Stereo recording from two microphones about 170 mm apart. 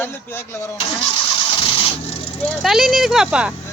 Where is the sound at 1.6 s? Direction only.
30° left (ahead or behind).